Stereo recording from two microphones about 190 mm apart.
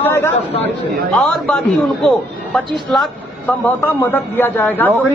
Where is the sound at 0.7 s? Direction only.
55° right (ahead or behind).